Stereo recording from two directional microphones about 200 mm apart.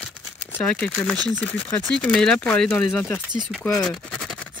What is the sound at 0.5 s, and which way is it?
Speech, 5° left (ahead or behind).